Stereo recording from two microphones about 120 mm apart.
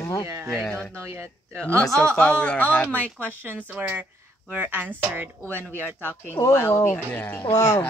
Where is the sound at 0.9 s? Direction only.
20° right (ahead or behind).